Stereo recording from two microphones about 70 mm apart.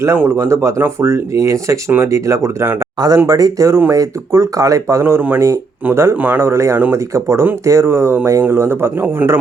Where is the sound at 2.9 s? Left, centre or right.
Right.